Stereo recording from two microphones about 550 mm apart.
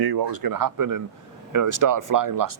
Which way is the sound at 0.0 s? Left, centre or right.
Right.